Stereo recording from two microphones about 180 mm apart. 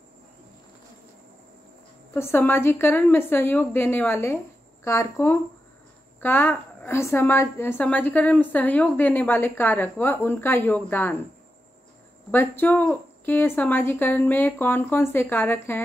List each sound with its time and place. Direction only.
2.1 s a woman's voice: 15° left (ahead or behind)
12.3 s a woman's voice: 10° left (ahead or behind)